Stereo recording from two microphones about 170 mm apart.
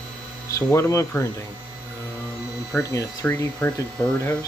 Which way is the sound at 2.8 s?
20° left (ahead or behind).